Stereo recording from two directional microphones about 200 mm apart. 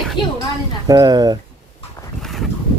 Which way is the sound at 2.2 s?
Centre (ahead or behind).